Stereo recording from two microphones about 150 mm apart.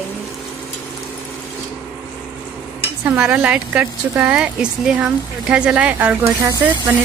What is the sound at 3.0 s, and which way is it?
A woman's voice, 10° right (ahead or behind).